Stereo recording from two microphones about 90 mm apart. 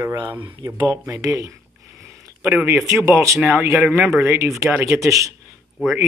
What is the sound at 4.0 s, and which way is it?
Speech, 5° right (ahead or behind).